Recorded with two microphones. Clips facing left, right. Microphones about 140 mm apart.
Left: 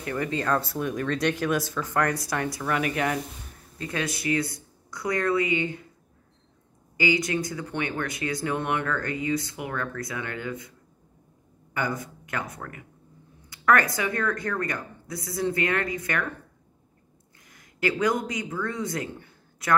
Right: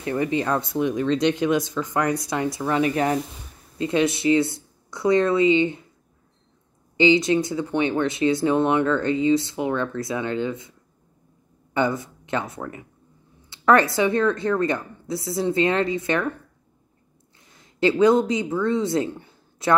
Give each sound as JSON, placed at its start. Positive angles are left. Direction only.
{"t": 0.0, "sound": "speech", "side_deg": -20}
{"t": 7.0, "sound": "speech", "side_deg": -25}
{"t": 11.7, "sound": "speech", "side_deg": -25}
{"t": 17.4, "sound": "speech", "side_deg": -25}